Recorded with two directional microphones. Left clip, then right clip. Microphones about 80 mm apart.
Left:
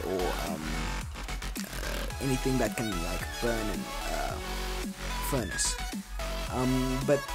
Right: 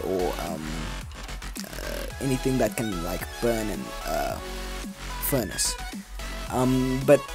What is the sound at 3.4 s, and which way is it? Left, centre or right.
Speech, right.